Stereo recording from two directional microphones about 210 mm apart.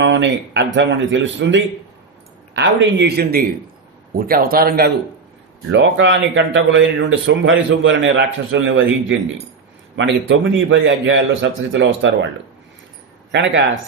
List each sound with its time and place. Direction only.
0.0 s speech: 60° right (ahead or behind)
5.7 s speech: 60° right (ahead or behind)
13.3 s speech: 60° right (ahead or behind)